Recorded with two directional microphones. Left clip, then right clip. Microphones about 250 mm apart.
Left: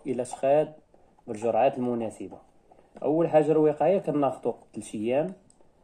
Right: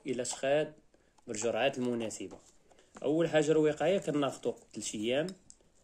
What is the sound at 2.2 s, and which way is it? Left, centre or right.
Speech, right.